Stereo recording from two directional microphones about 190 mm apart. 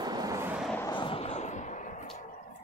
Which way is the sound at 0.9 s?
30° left (ahead or behind).